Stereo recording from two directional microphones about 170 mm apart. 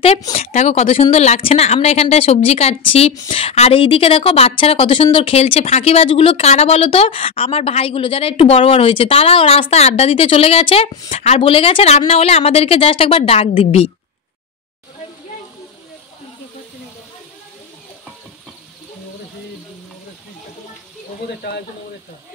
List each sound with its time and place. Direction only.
0.3 s a woman's voice: 35° left (ahead or behind)
21.4 s speech: 70° left (ahead or behind)